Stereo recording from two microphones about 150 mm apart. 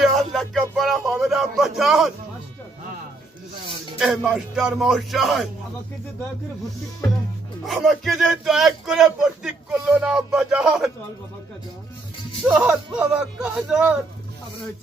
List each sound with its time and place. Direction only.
0.0 s music: centre (ahead or behind)
0.8 s speech: centre (ahead or behind)
3.9 s speech: centre (ahead or behind)
7.6 s speech: centre (ahead or behind)
12.5 s a man's voice: 5° right (ahead or behind)